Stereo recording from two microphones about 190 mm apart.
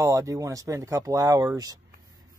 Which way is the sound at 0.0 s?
15° right (ahead or behind).